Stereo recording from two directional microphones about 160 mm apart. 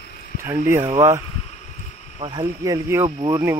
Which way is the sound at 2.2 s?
30° right (ahead or behind).